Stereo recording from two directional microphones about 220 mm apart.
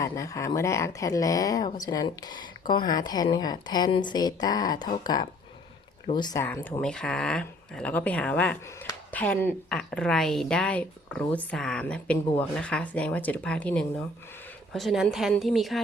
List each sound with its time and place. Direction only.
0.0 s speech: 15° left (ahead or behind)